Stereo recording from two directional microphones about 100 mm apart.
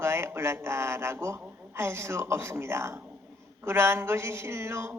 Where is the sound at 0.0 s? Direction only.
25° right (ahead or behind).